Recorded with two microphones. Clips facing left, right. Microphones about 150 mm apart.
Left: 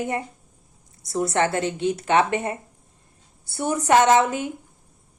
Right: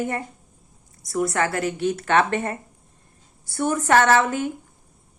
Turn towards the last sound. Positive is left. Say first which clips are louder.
# left 1 dB
turn(degrees=15)  # may be behind; listen again after turning